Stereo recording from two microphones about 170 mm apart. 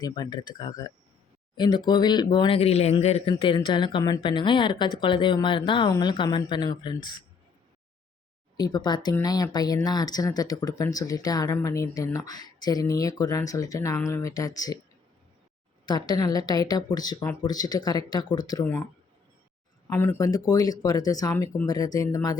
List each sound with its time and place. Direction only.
0.0 s speech: 25° left (ahead or behind)
3.3 s speech: 25° left (ahead or behind)
8.5 s speech: 25° left (ahead or behind)
15.9 s speech: 25° left (ahead or behind)
18.6 s speech: 10° left (ahead or behind)
19.9 s speech: 10° left (ahead or behind)